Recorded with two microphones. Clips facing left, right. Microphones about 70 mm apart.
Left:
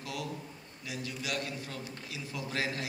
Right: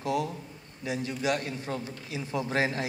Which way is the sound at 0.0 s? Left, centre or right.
Right.